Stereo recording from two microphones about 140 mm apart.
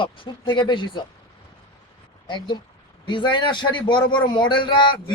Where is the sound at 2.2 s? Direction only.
35° left (ahead or behind).